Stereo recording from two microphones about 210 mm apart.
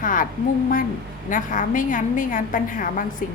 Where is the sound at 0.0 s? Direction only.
40° left (ahead or behind).